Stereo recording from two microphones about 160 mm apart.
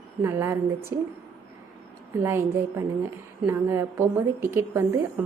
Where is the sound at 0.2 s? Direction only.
15° right (ahead or behind).